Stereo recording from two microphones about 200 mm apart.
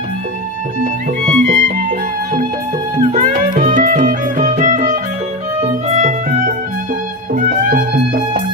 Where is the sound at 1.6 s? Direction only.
45° right (ahead or behind).